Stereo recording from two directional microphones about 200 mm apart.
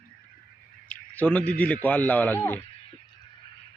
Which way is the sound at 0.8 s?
5° left (ahead or behind).